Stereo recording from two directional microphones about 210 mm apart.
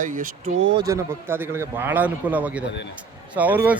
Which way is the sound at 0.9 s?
10° right (ahead or behind).